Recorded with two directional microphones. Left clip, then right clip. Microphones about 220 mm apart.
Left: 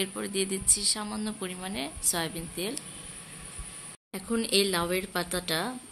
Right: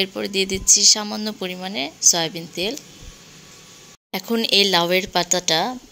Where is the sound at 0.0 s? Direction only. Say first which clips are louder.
Right 9 dB; 25° right (ahead or behind).